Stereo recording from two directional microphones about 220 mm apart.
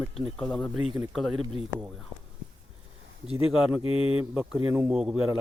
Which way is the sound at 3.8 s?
25° left (ahead or behind).